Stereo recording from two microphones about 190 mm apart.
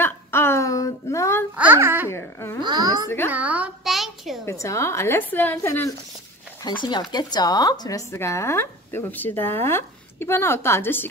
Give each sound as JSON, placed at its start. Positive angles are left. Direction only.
{"t": 0.0, "sound": "a sound", "side_deg": 10}
{"t": 1.6, "sound": "babbling", "side_deg": -10}
{"t": 2.0, "sound": "speech", "side_deg": 15}
{"t": 2.6, "sound": "a child's voice", "side_deg": -20}
{"t": 3.3, "sound": "a child's voice", "side_deg": -5}
{"t": 4.5, "sound": "speech", "side_deg": 15}